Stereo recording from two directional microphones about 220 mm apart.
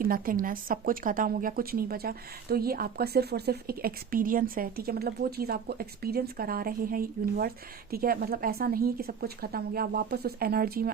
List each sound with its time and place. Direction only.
0.0 s a woman's voice: 40° right (ahead or behind)